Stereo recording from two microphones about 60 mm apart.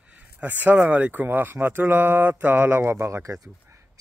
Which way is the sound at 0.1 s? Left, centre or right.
Right.